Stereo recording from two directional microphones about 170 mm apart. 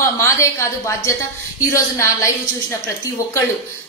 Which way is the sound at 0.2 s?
15° left (ahead or behind).